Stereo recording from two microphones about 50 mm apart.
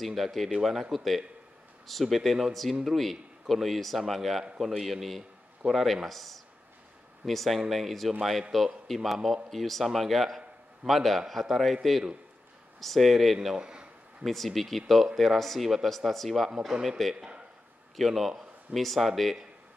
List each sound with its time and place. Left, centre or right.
0.0 s speech: centre
13.6 s speech: centre
14.2 s a man's voice: centre
17.9 s speech: centre